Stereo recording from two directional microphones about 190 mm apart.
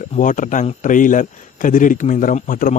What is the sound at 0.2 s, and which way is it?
A man's voice, 40° left (ahead or behind).